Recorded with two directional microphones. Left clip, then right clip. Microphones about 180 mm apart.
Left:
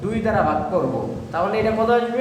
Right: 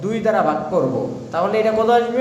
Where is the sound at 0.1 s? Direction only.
25° right (ahead or behind).